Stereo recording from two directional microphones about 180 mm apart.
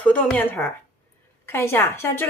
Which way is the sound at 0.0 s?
10° left (ahead or behind).